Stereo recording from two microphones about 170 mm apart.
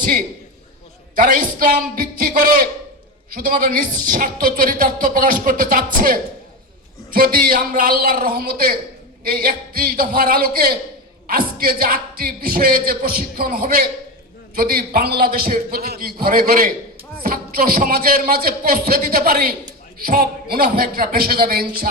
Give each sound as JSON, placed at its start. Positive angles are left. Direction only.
{"t": 1.1, "sound": "speech", "side_deg": -55}